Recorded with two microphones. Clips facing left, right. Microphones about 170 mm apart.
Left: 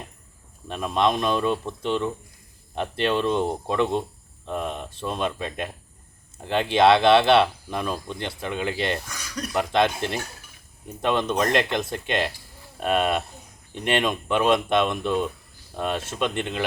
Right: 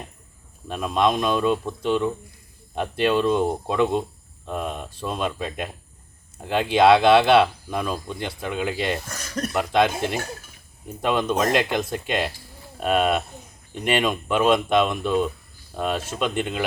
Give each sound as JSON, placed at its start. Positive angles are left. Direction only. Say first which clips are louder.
{"t": 0.7, "sound": "speech", "louder": "right 1 dB", "side_deg": 0}
{"t": 9.0, "sound": "a sound", "louder": "right 4 dB", "side_deg": -45}
{"t": 9.5, "sound": "speech", "louder": "right 1 dB", "side_deg": -5}